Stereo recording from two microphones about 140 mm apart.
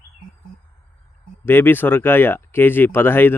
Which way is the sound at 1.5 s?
15° left (ahead or behind).